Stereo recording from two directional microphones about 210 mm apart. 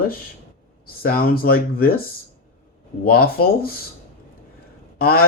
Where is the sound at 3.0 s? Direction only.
45° left (ahead or behind).